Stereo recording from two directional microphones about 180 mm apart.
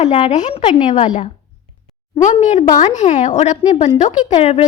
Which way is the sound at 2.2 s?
40° left (ahead or behind).